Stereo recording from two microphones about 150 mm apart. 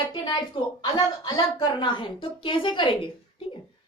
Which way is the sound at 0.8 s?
30° left (ahead or behind).